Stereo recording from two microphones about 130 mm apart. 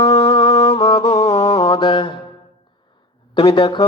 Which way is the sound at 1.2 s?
50° left (ahead or behind).